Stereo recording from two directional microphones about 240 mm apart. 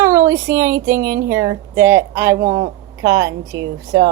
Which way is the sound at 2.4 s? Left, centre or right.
Right.